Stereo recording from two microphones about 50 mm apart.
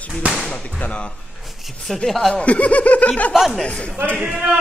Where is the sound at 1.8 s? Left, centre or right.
Centre.